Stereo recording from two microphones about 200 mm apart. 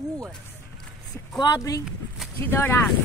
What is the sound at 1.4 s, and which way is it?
Speech, 20° left (ahead or behind).